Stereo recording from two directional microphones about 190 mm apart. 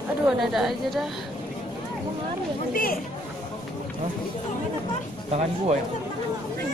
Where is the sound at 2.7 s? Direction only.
50° left (ahead or behind).